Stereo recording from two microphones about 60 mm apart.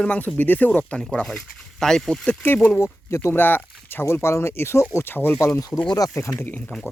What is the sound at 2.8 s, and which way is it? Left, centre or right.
Speech, left.